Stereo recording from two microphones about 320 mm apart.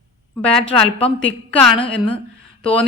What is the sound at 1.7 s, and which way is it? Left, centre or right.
Speech, centre.